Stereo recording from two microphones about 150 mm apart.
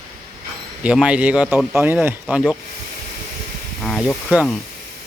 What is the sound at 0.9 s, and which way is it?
Speech, 5° right (ahead or behind).